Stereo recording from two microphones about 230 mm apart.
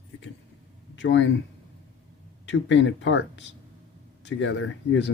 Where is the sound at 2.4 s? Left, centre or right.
Left.